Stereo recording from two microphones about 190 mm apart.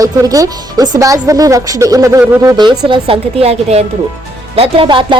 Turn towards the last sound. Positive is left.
turn(degrees=-25)  # may be behind; listen again after turning